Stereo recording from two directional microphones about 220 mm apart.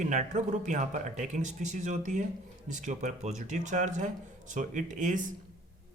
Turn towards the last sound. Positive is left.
turn(degrees=-35)  # may be behind; listen again after turning